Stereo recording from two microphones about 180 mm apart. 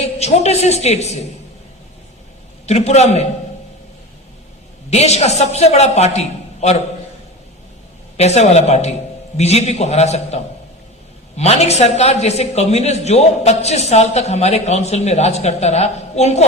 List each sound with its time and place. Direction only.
0.0 s a woman's voice: 35° left (ahead or behind)
2.6 s a man's voice: 35° left (ahead or behind)
4.9 s a man's voice: 35° left (ahead or behind)
8.1 s a man's voice: 35° left (ahead or behind)